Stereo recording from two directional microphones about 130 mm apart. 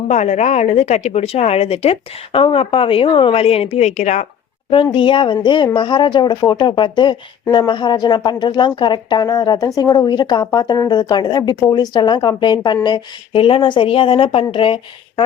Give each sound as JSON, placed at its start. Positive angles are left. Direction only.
{"t": 0.1, "sound": "a woman's voice", "side_deg": 60}
{"t": 4.7, "sound": "a woman's voice", "side_deg": 40}